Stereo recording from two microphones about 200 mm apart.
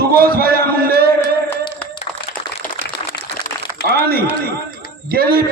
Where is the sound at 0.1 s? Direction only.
50° right (ahead or behind).